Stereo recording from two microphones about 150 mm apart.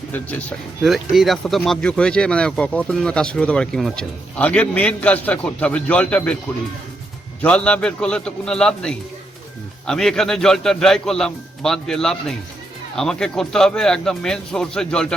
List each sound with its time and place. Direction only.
0.1 s speech: 10° left (ahead or behind)
0.8 s speech: centre (ahead or behind)
7.4 s a man's voice: 5° left (ahead or behind)